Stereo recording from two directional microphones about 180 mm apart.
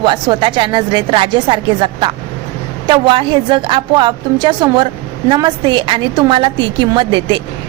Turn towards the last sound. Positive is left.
turn(degrees=-25)  # may be behind; listen again after turning